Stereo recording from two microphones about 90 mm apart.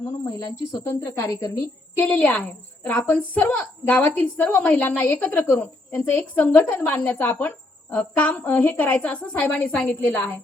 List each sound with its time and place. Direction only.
0.3 s speech: 40° left (ahead or behind)
2.0 s a woman's voice: 20° left (ahead or behind)